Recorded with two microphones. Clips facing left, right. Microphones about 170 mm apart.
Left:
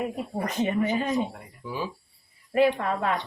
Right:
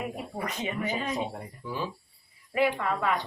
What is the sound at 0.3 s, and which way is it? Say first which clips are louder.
Speech: left 8 dB; 40° left (ahead or behind).